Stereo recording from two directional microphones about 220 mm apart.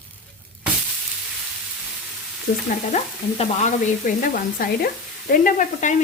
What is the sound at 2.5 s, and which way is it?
Stir, 45° left (ahead or behind).